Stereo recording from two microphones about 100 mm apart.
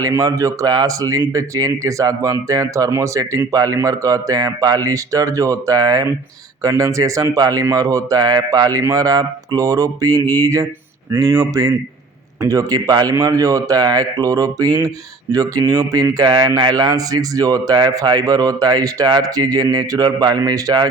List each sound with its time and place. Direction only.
0.0 s speech: 35° right (ahead or behind)